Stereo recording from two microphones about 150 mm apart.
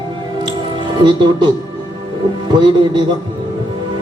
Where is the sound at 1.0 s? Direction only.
30° right (ahead or behind).